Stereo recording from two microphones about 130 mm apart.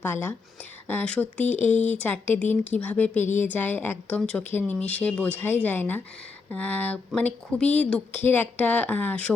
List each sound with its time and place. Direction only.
0.0 s speech: 15° left (ahead or behind)
1.7 s speech: 65° left (ahead or behind)
2.0 s speech: 15° left (ahead or behind)